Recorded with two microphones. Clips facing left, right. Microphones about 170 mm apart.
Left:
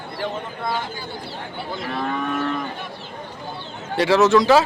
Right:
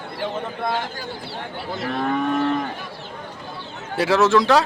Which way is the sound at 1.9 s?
45° right (ahead or behind).